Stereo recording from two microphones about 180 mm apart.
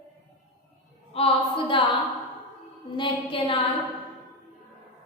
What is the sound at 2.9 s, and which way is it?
Speech, 25° left (ahead or behind).